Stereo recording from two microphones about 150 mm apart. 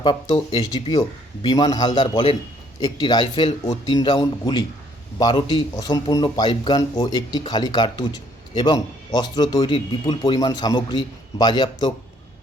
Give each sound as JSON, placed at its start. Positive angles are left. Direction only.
{"t": 0.0, "sound": "speech", "side_deg": 35}